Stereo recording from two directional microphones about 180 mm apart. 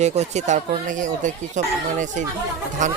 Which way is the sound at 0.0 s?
40° right (ahead or behind).